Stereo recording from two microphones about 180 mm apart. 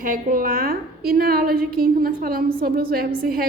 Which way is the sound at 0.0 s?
50° right (ahead or behind).